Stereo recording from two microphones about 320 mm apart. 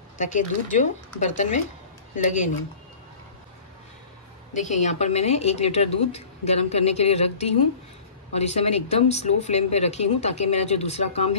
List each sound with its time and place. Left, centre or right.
0.2 s a woman's voice: left
4.6 s a woman's voice: left